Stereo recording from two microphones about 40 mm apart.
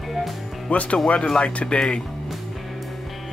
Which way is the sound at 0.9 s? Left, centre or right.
Left.